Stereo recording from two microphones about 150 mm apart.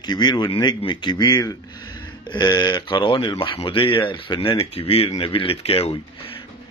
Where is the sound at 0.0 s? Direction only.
30° left (ahead or behind).